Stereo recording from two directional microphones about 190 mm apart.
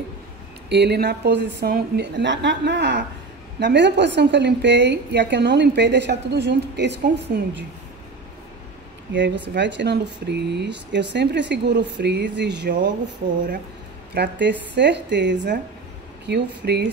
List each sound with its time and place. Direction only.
0.7 s a woman's voice: 60° right (ahead or behind)
9.1 s a woman's voice: 70° right (ahead or behind)
14.1 s a woman's voice: 65° right (ahead or behind)